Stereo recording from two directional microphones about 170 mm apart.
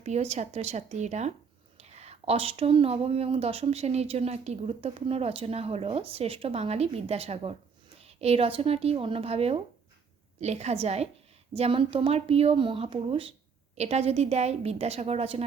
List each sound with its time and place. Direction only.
0.0 s speech: 40° right (ahead or behind)